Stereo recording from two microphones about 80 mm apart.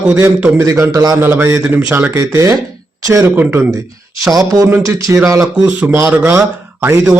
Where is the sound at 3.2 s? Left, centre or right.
Right.